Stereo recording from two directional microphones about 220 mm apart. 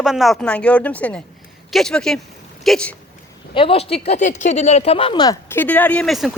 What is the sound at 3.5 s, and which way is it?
Speech, 25° left (ahead or behind).